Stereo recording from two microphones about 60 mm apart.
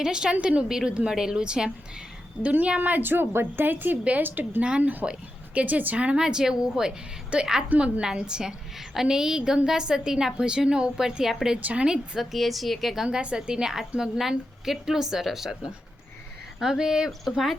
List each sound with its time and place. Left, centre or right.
0.0 s a woman's voice: centre
6.2 s a woman's voice: centre
7.7 s a woman's voice: right
8.0 s a woman's voice: centre
11.6 s a woman's voice: centre
13.1 s a woman's voice: centre